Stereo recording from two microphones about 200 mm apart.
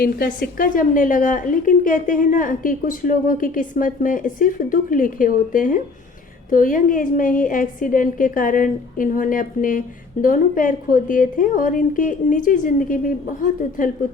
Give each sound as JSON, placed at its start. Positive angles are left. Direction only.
{"t": 0.0, "sound": "a woman's voice", "side_deg": 45}